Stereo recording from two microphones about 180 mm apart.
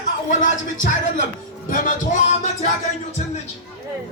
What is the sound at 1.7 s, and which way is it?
Music, 45° left (ahead or behind).